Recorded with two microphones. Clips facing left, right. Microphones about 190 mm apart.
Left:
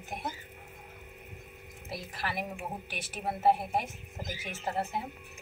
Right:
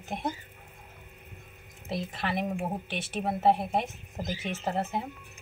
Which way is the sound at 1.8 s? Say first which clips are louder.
Right 6 dB; 25° right (ahead or behind).